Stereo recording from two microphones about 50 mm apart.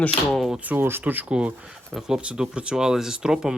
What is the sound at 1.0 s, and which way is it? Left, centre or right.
Speech, right.